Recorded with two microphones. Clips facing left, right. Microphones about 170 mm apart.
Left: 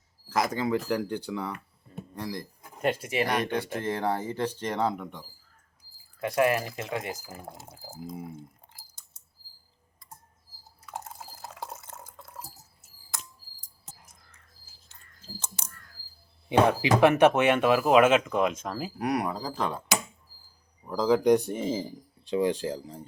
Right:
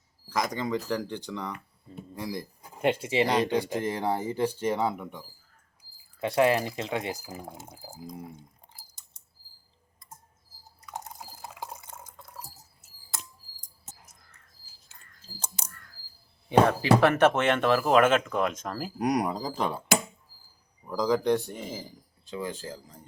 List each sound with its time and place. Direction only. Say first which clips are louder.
0.3 s speech: left 2 dB; 5° left (ahead or behind)
2.1 s a sound: right 1 dB; 10° right (ahead or behind)
2.9 s speech: right 4 dB; 25° right (ahead or behind)
3.4 s speech: right 2 dB; 15° right (ahead or behind)
6.1 s speech: right 1 dB; 25° right (ahead or behind)
7.3 s speech: right 2 dB; centre (ahead or behind)
10.8 s liquid: even; 5° left (ahead or behind)
16.5 s speech: right 1 dB; 15° left (ahead or behind)
18.9 s speech: right 3 dB; 15° right (ahead or behind)
20.8 s speech: left 3 dB; 5° left (ahead or behind)
21.3 s speech: left 5 dB; 20° left (ahead or behind)